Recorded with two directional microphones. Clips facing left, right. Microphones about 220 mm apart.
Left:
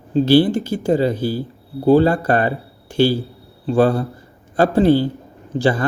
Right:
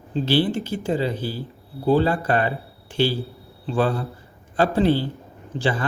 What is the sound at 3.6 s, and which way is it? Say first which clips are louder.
Speech: left 7 dB; 45° left (ahead or behind).